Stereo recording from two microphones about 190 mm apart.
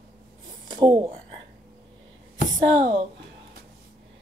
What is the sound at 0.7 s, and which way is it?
Speech, 30° right (ahead or behind).